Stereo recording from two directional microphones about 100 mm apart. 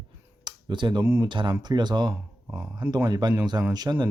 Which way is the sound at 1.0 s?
25° right (ahead or behind).